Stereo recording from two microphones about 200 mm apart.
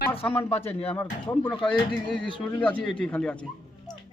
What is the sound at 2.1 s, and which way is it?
Speech, 5° left (ahead or behind).